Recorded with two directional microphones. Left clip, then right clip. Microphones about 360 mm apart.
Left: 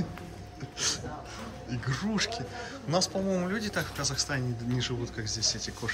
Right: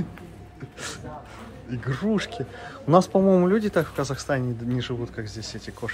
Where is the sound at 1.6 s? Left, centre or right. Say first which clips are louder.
Right 7 dB; centre.